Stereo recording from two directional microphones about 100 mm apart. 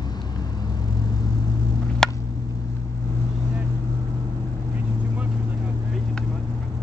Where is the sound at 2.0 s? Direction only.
5° left (ahead or behind).